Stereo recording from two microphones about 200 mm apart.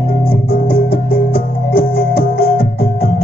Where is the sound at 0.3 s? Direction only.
45° left (ahead or behind).